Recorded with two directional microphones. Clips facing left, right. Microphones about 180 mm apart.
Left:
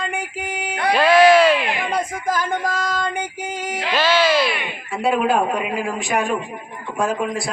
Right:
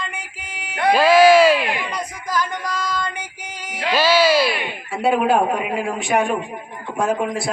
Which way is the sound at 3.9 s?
10° right (ahead or behind).